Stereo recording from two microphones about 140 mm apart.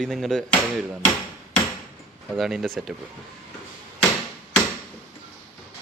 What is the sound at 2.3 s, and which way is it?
Speech, centre (ahead or behind).